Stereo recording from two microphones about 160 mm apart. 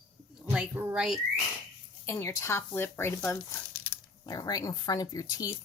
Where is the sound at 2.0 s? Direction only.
15° left (ahead or behind).